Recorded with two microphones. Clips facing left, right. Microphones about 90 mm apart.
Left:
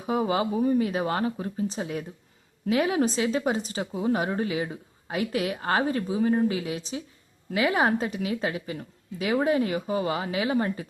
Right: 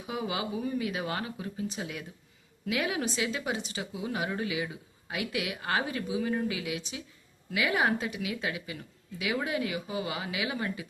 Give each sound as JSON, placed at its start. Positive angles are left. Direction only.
{"t": 0.0, "sound": "speech", "side_deg": 40}